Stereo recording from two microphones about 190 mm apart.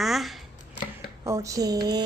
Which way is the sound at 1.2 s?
20° right (ahead or behind).